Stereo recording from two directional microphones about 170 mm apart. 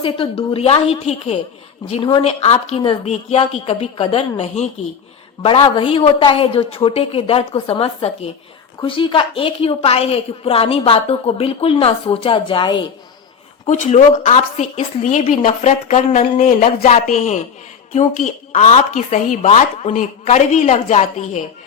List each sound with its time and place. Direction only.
0.0 s a woman's voice: 30° left (ahead or behind)
13.7 s speech: 45° left (ahead or behind)